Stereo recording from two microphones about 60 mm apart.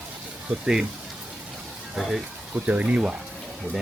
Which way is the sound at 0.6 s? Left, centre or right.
Centre.